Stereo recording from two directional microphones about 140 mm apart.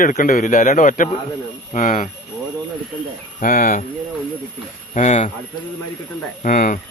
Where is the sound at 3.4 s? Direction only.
75° left (ahead or behind).